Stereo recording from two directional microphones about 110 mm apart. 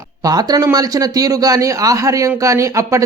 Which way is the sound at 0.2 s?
35° right (ahead or behind).